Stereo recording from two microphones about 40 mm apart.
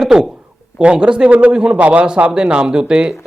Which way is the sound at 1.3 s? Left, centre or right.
Right.